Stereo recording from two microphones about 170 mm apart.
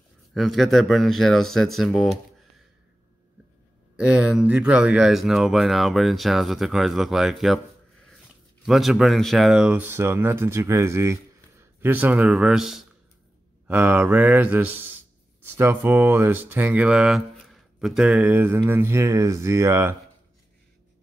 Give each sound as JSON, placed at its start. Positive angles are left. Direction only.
{"t": 0.3, "sound": "speech", "side_deg": 0}
{"t": 3.9, "sound": "speech", "side_deg": -5}